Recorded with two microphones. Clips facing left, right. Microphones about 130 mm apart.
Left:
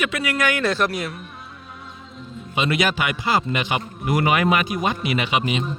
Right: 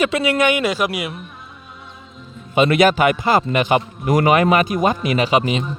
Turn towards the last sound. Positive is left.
turn(degrees=-40)  # may be behind; listen again after turning